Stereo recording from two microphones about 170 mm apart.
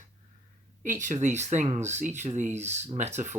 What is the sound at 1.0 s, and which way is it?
Speech, 45° right (ahead or behind).